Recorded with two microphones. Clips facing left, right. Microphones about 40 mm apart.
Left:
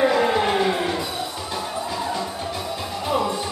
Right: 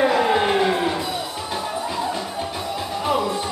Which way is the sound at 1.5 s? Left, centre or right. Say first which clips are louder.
Right 3 dB; centre.